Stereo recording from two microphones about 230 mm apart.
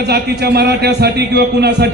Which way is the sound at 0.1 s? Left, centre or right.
Right.